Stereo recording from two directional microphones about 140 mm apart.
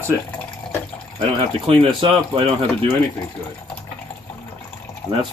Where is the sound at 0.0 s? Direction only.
10° left (ahead or behind).